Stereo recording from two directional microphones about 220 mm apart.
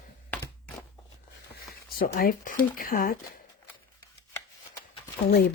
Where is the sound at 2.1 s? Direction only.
40° left (ahead or behind).